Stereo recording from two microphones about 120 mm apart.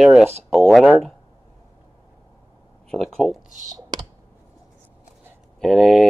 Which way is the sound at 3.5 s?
90° right.